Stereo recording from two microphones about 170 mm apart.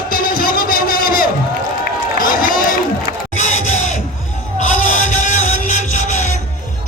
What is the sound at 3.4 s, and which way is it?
Crowd, 45° left (ahead or behind).